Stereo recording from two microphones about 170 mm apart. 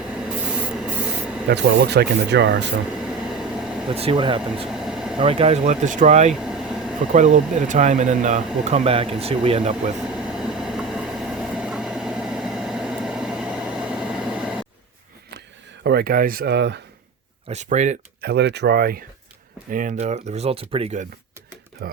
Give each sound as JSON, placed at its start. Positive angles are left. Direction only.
{"t": 0.0, "sound": "spray", "side_deg": -5}
{"t": 1.5, "sound": "speech", "side_deg": -85}
{"t": 2.9, "sound": "train", "side_deg": -5}
{"t": 3.8, "sound": "speech", "side_deg": -35}
{"t": 4.7, "sound": "vehicle", "side_deg": -5}
{"t": 5.1, "sound": "speech", "side_deg": -35}
{"t": 6.3, "sound": "air conditioning", "side_deg": -5}
{"t": 7.1, "sound": "speech", "side_deg": -45}
{"t": 10.0, "sound": "vehicle", "side_deg": -5}
{"t": 15.8, "sound": "speech", "side_deg": -70}
{"t": 17.5, "sound": "speech", "side_deg": -45}
{"t": 18.2, "sound": "speech", "side_deg": -75}
{"t": 19.7, "sound": "speech", "side_deg": -45}
{"t": 21.8, "sound": "speech", "side_deg": -65}